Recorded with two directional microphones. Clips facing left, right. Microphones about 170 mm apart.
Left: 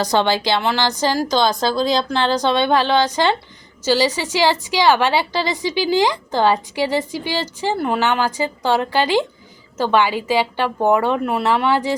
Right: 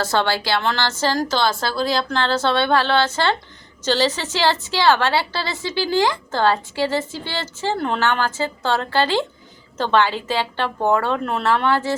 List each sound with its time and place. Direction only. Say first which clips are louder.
0.0 s a woman's voice: left 3 dB; 15° left (ahead or behind)